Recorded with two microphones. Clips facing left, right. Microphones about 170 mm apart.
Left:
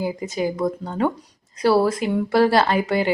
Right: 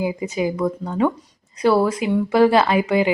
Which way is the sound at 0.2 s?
5° right (ahead or behind).